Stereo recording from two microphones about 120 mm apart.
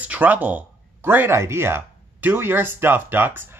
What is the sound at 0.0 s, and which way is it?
Speech, 15° right (ahead or behind).